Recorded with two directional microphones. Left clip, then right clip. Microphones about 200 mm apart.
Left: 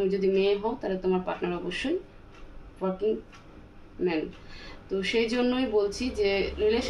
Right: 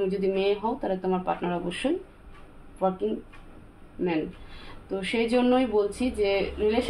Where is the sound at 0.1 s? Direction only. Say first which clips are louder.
Left 1 dB; 35° right (ahead or behind).